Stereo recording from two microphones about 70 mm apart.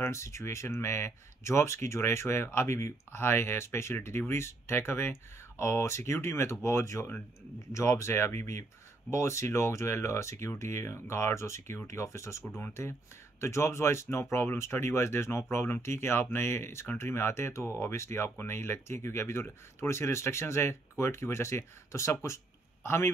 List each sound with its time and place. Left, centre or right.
0.0 s speech: left